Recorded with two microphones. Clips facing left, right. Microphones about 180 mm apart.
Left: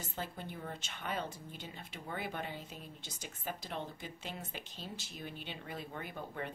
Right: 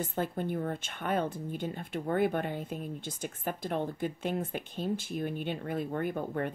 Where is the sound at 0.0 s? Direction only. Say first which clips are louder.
Right 11 dB; 55° right (ahead or behind).